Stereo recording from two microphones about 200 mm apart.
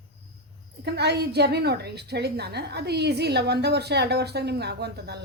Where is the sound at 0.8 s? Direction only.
55° right (ahead or behind).